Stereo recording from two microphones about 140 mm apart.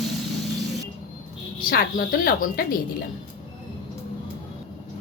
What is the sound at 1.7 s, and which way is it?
A woman's voice, 90° left.